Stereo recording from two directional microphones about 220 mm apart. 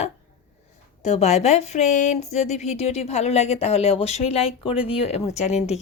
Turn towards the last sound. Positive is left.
turn(degrees=30)  # may be behind; listen again after turning